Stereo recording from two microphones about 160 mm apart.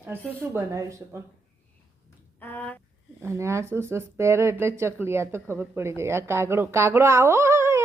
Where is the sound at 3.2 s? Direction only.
15° right (ahead or behind).